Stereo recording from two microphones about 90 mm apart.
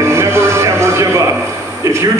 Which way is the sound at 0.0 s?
30° right (ahead or behind).